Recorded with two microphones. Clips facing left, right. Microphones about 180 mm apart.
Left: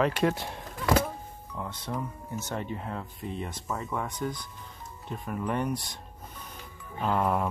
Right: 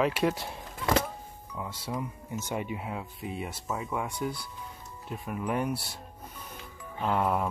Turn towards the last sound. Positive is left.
turn(degrees=0)  # may be behind; listen again after turning